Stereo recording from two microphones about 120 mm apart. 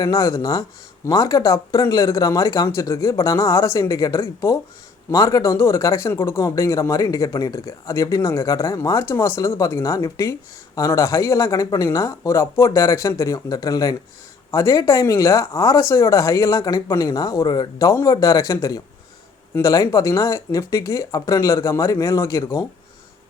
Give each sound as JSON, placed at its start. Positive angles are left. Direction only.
{"t": 0.0, "sound": "speech", "side_deg": 30}